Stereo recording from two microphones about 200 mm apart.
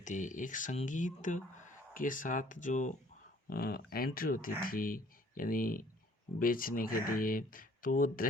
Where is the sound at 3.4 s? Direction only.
50° left (ahead or behind).